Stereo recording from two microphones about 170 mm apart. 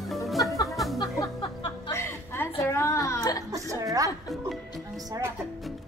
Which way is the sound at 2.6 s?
15° left (ahead or behind).